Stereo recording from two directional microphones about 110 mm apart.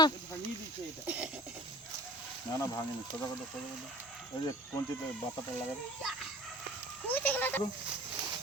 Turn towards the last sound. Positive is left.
turn(degrees=15)  # may be behind; listen again after turning